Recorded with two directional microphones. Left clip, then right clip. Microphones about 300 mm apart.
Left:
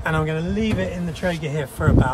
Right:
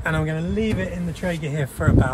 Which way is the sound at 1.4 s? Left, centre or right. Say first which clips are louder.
Left 1 dB; centre.